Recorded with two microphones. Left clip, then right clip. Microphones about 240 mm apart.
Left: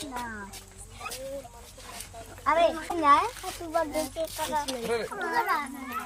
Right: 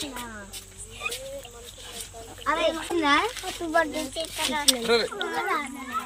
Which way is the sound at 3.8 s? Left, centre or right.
Left.